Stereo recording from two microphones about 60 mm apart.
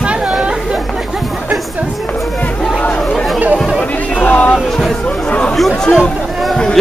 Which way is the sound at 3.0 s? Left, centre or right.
Centre.